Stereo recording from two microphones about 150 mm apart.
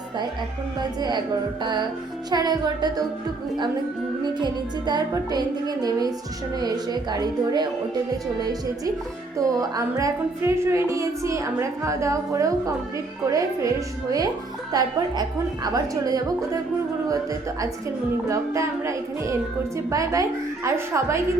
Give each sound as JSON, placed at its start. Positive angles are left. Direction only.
{"t": 0.8, "sound": "a woman's voice", "side_deg": -30}
{"t": 2.3, "sound": "a woman's voice", "side_deg": -30}
{"t": 4.2, "sound": "a woman's voice", "side_deg": -30}
{"t": 9.4, "sound": "a woman's voice", "side_deg": -25}
{"t": 18.3, "sound": "a woman's voice", "side_deg": -20}